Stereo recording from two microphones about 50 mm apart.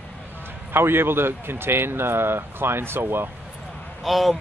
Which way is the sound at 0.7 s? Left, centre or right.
Right.